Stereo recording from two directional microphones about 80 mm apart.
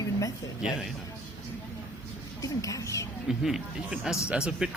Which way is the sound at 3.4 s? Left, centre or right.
Centre.